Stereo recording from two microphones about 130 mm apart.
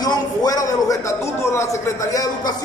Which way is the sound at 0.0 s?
30° left (ahead or behind).